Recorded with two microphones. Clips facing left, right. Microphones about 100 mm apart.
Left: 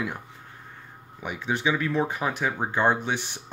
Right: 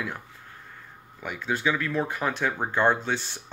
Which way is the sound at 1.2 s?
15° left (ahead or behind).